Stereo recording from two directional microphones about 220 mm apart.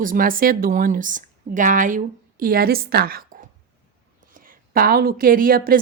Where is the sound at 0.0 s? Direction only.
40° right (ahead or behind).